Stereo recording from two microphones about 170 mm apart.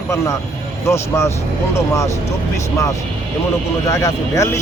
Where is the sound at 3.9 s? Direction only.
20° left (ahead or behind).